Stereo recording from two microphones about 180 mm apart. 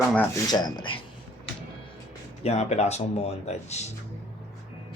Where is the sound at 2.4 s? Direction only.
35° left (ahead or behind).